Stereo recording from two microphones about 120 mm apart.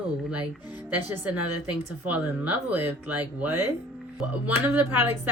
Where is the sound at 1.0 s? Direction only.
15° right (ahead or behind).